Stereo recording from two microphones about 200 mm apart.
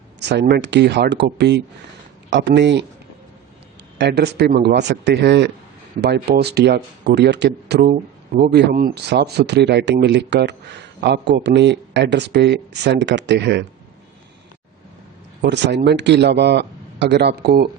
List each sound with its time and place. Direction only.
0.2 s speech: 55° right (ahead or behind)
3.9 s speech: 55° right (ahead or behind)
15.4 s speech: 60° right (ahead or behind)